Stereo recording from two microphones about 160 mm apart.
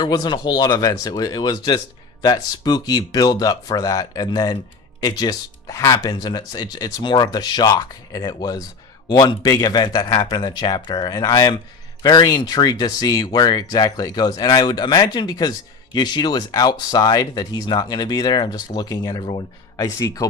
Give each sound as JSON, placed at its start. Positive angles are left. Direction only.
{"t": 0.0, "sound": "speech", "side_deg": 25}